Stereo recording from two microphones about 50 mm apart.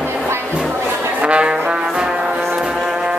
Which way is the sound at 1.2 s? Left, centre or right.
Right.